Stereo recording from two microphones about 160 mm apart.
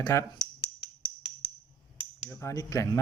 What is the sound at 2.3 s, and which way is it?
Speech, 20° left (ahead or behind).